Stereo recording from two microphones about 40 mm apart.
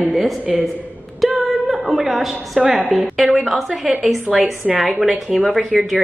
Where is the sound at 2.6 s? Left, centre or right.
Centre.